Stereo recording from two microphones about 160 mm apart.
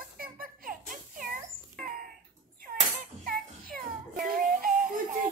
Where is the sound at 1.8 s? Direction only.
60° right (ahead or behind).